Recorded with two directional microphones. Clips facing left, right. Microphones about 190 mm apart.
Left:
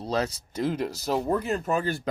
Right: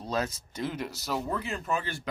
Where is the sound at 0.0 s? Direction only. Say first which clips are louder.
Left 4 dB; 30° left (ahead or behind).